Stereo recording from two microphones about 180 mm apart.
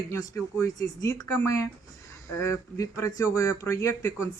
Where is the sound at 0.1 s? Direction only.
15° left (ahead or behind).